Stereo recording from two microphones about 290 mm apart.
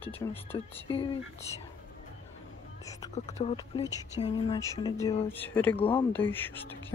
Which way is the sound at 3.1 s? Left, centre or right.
Left.